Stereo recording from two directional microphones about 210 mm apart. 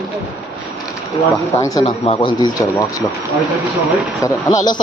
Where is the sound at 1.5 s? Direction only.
15° left (ahead or behind).